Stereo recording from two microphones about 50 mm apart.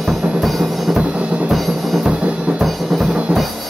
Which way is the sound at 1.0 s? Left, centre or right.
Right.